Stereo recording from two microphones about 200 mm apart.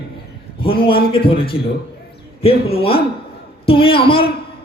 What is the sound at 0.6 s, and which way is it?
A man's voice, 25° left (ahead or behind).